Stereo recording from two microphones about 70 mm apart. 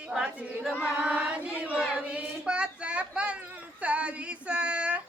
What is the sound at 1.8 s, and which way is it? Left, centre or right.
A child's voice, centre.